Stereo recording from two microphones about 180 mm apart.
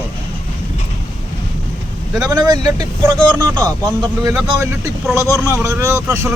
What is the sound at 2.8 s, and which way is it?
Speech, 20° right (ahead or behind).